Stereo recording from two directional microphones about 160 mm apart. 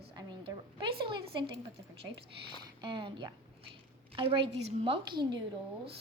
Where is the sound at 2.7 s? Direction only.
30° right (ahead or behind).